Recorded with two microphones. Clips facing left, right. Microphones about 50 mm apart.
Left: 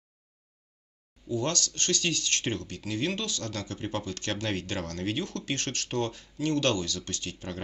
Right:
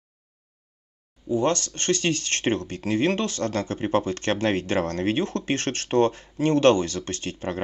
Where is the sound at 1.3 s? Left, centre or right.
Right.